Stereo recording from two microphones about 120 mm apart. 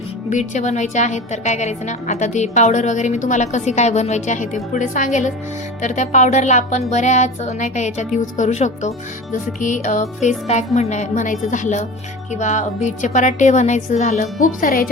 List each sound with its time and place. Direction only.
0.3 s a woman's voice: 85° left
9.3 s a woman's voice: 90° left